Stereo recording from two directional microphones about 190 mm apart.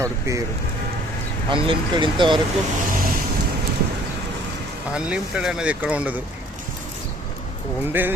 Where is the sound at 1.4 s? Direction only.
25° right (ahead or behind).